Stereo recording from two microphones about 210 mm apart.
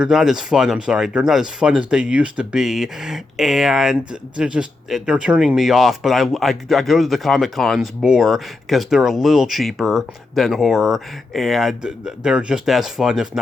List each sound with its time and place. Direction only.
0.0 s speech: centre (ahead or behind)